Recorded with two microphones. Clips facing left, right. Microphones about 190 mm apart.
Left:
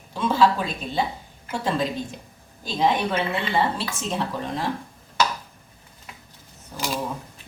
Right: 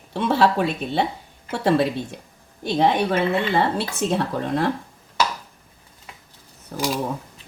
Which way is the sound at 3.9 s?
60° right (ahead or behind).